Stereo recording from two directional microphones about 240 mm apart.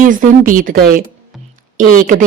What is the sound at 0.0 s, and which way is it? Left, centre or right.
A woman's voice, right.